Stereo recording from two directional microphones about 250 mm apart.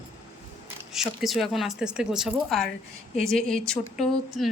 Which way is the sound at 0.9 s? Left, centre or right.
Centre.